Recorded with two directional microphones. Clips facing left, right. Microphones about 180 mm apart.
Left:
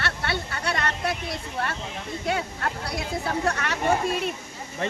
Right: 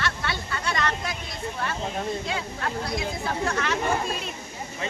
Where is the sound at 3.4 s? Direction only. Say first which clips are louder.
Even; 65° left (ahead or behind).